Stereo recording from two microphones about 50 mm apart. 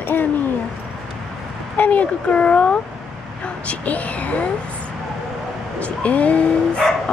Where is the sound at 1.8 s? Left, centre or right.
Left.